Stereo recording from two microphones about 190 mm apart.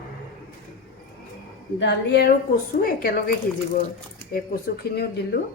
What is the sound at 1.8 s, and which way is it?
Speech, 65° left (ahead or behind).